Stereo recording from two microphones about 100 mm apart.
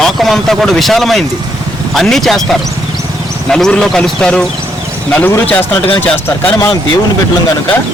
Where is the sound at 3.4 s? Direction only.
5° left (ahead or behind).